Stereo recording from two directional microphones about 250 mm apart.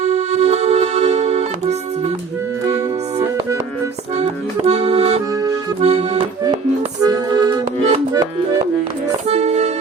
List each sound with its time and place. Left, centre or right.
0.0 s music: right
4.2 s accordion: right
9.2 s music: right